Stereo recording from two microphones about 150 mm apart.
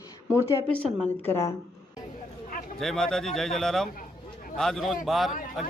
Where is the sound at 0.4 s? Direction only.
10° left (ahead or behind).